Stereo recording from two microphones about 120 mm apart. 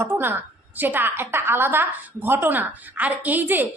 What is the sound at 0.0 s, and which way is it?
A woman's voice, 20° right (ahead or behind).